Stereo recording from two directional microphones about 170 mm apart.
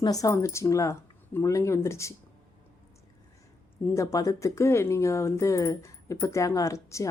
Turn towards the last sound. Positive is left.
turn(degrees=20)  # may be behind; listen again after turning